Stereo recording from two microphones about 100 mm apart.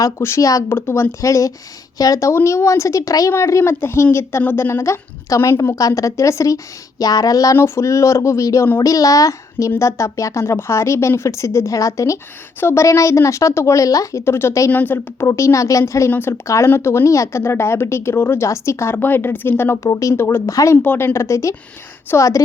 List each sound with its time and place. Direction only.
0.0 s a woman's voice: 30° left (ahead or behind)
20.8 s speech: 15° left (ahead or behind)
21.1 s a woman's voice: 30° left (ahead or behind)